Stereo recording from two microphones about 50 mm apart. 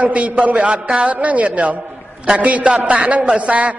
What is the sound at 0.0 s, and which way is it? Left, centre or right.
A man's voice, right.